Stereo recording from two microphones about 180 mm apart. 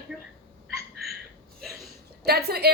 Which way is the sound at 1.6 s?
Centre (ahead or behind).